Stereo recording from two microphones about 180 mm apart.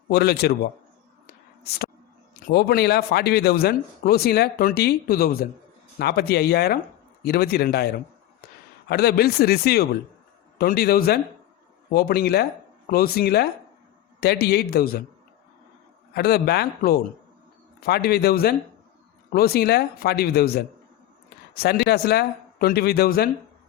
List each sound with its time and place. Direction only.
0.1 s speech: 60° left (ahead or behind)
1.6 s a sound: 60° left (ahead or behind)
2.5 s speech: 60° left (ahead or behind)
16.1 s speech: 60° left (ahead or behind)